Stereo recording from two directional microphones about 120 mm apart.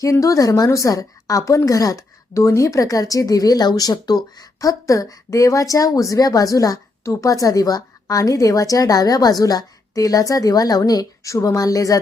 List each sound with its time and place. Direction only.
0.0 s a woman's voice: 25° left (ahead or behind)